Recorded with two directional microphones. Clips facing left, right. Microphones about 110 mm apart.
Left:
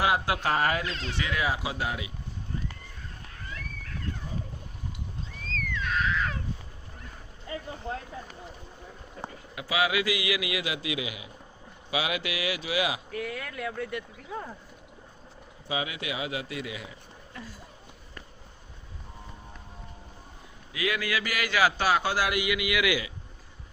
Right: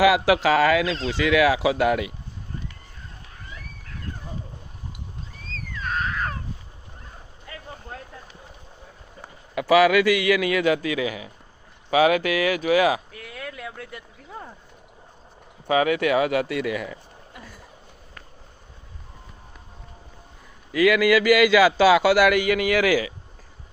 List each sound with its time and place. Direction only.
0.0 s speech: 90° right; by 2.1 s 65° right (ahead or behind)
5.5 s a sound: 40° right (ahead or behind)
9.6 s a man's voice: 75° right (ahead or behind); by 13.0 s 45° right (ahead or behind)
13.1 s speech: centre (ahead or behind)
15.6 s a man's voice: 60° right (ahead or behind)
20.7 s speech: 90° right
22.4 s a man's voice: 45° right (ahead or behind)